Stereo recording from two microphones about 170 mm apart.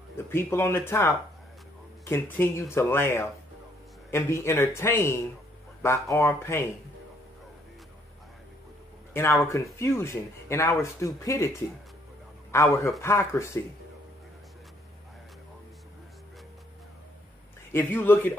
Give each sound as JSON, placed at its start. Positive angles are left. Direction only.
{"t": 0.3, "sound": "speech", "side_deg": 15}
{"t": 9.1, "sound": "a man's voice", "side_deg": 15}
{"t": 17.7, "sound": "speech", "side_deg": 15}